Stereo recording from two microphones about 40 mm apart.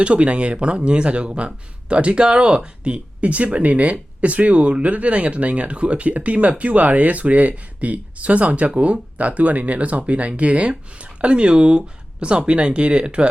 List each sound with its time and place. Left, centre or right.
0.0 s speech: right